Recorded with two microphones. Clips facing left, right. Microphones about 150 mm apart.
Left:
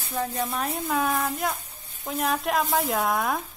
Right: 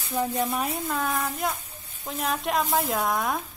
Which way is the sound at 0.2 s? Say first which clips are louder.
Right 2 dB; 10° right (ahead or behind).